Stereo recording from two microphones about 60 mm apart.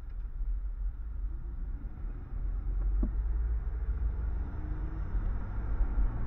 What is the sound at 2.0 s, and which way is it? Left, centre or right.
Vehicle, centre.